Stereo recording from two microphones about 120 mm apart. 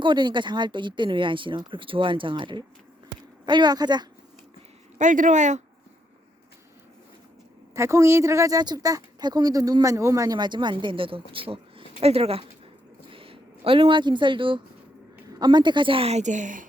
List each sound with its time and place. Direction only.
0.0 s a woman's voice: 40° right (ahead or behind)
4.9 s speech: 90° right
7.8 s a woman's voice: 25° right (ahead or behind); by 12.5 s 55° right (ahead or behind)
13.1 s a sound: 50° right (ahead or behind)
15.3 s a woman's voice: 35° right (ahead or behind); by 16.6 s 90° right